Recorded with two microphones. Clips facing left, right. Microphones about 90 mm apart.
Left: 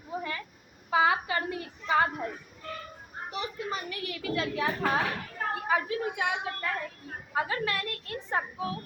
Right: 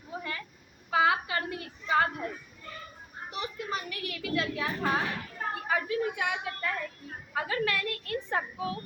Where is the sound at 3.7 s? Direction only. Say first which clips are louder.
Even; 30° left (ahead or behind).